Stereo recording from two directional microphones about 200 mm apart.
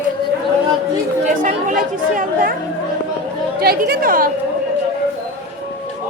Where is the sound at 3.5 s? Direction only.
50° right (ahead or behind).